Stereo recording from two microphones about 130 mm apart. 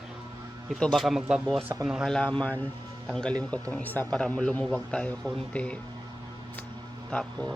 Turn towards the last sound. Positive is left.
turn(degrees=5)  # may be behind; listen again after turning